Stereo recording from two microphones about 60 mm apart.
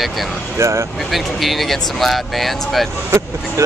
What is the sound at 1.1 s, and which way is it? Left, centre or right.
Speech, centre.